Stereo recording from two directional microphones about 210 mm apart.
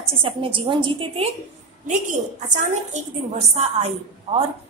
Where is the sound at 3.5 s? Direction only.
30° right (ahead or behind).